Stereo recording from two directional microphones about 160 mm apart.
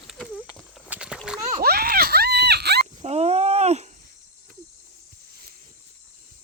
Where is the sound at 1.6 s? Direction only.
75° right (ahead or behind); by 2.8 s 90° right.